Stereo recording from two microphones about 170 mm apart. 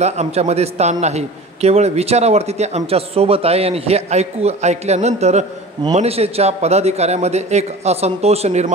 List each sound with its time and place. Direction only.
0.0 s a man's voice: 40° right (ahead or behind)